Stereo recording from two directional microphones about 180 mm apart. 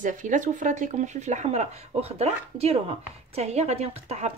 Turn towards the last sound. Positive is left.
turn(degrees=-35)  # may be behind; listen again after turning